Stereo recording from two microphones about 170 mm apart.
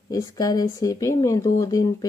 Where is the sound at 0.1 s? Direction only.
20° left (ahead or behind).